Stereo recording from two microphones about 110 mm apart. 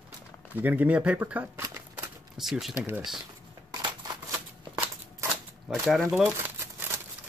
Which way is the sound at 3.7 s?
45° right (ahead or behind).